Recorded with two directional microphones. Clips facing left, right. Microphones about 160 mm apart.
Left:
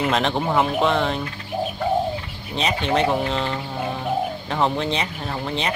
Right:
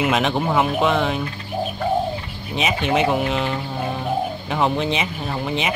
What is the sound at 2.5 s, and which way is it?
Speech, 10° right (ahead or behind).